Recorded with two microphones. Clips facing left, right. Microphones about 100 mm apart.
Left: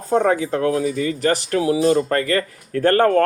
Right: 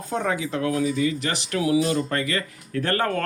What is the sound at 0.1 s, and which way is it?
Speech, 40° left (ahead or behind).